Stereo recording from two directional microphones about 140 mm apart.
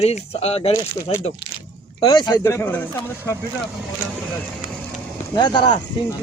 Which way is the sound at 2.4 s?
20° left (ahead or behind).